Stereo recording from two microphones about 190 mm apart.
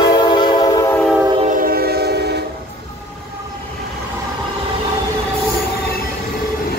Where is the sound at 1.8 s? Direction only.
55° right (ahead or behind).